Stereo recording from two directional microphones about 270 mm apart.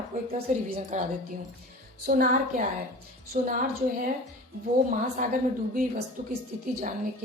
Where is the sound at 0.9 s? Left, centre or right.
Right.